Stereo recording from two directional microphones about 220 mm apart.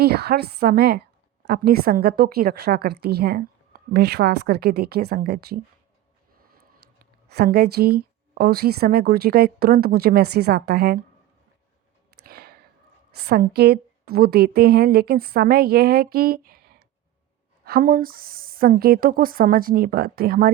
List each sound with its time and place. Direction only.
0.0 s a woman's voice: 45° right (ahead or behind)
7.3 s a woman's voice: 50° right (ahead or behind)
12.2 s a sound: 45° right (ahead or behind)
13.2 s a woman's voice: 45° right (ahead or behind)